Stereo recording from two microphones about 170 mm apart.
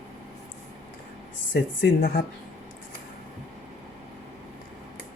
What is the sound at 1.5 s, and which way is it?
Speech, 75° left (ahead or behind).